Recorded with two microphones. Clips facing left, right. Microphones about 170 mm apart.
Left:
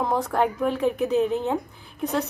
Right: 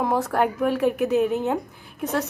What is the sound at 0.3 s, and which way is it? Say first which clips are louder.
A woman's voice: right 1 dB; 5° right (ahead or behind).